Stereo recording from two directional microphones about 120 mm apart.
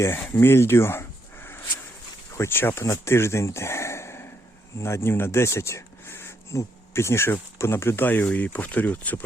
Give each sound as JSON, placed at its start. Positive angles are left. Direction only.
{"t": 0.0, "sound": "speech", "side_deg": 20}